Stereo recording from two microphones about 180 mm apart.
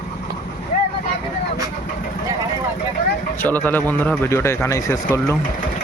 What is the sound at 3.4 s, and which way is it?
A man's voice, 10° left (ahead or behind).